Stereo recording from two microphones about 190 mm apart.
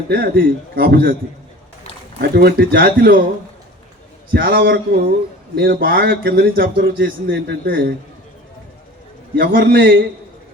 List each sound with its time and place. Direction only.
0.1 s a man's voice: 55° right (ahead or behind)
2.3 s a man's voice: 55° right (ahead or behind)
4.4 s a man's voice: 50° right (ahead or behind)
9.3 s a man's voice: 50° right (ahead or behind)